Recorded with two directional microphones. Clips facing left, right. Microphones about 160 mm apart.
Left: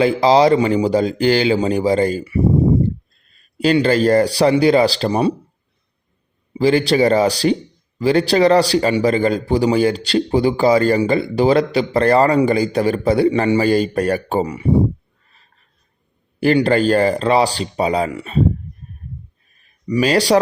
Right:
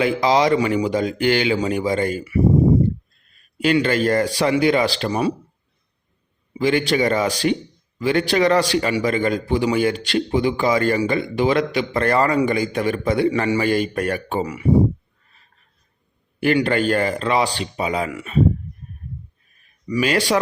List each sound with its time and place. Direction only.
0.0 s a man's voice: 30° left (ahead or behind)
3.6 s a man's voice: 35° left (ahead or behind)
6.5 s a man's voice: 35° left (ahead or behind)
16.4 s a man's voice: 35° left (ahead or behind)
19.9 s a man's voice: 35° left (ahead or behind)